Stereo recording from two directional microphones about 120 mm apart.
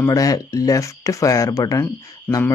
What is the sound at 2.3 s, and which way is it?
Cricket, 15° left (ahead or behind).